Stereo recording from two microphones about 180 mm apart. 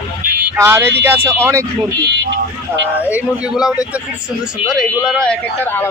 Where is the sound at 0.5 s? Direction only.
15° right (ahead or behind).